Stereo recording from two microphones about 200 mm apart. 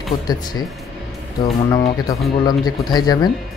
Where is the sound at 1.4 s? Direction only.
15° left (ahead or behind).